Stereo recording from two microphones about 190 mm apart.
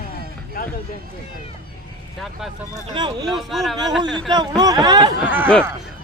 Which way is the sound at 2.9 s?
25° right (ahead or behind).